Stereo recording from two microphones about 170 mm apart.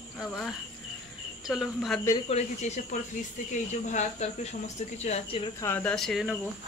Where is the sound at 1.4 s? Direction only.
Centre (ahead or behind).